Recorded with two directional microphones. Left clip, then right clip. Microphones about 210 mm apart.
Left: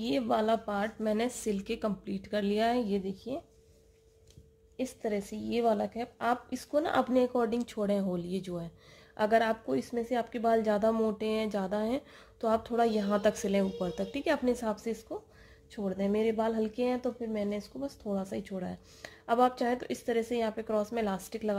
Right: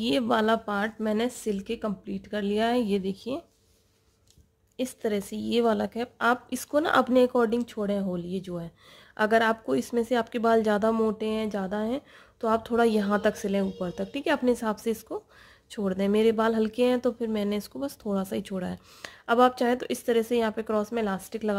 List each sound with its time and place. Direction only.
0.0 s speech: 25° right (ahead or behind)
4.7 s speech: 30° right (ahead or behind); by 8.6 s 10° right (ahead or behind)
9.1 s speech: 20° right (ahead or behind)